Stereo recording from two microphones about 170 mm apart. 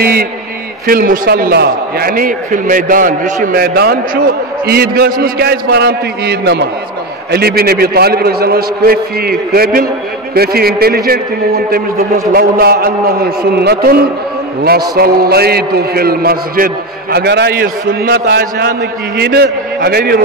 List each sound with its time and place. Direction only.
0.0 s a man's voice: 60° right (ahead or behind)
3.6 s a man's voice: 65° right (ahead or behind)
7.2 s a man's voice: 65° right (ahead or behind)
15.0 s a man's voice: 65° right (ahead or behind)